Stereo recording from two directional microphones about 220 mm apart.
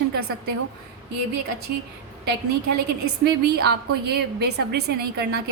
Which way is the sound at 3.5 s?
45° right (ahead or behind).